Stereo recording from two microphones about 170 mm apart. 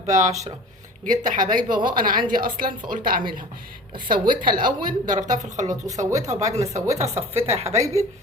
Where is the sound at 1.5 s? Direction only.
55° right (ahead or behind).